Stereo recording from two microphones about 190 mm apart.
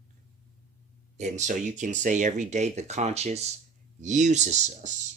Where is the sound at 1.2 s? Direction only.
40° right (ahead or behind).